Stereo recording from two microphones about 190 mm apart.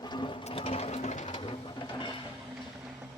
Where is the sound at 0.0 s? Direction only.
25° left (ahead or behind).